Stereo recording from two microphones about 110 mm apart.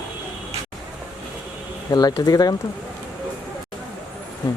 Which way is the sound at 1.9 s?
35° left (ahead or behind).